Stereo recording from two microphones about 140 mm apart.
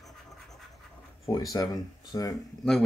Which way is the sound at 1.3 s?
25° left (ahead or behind).